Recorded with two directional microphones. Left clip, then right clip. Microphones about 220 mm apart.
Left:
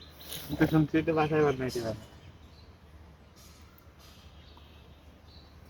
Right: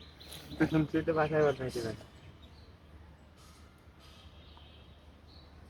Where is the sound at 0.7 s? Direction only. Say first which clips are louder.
Left 3 dB; 30° left (ahead or behind).